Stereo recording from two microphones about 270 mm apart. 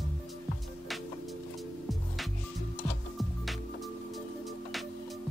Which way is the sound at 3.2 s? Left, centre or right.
Centre.